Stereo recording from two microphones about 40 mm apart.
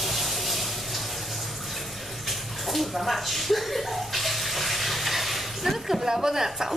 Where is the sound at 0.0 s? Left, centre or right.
Centre.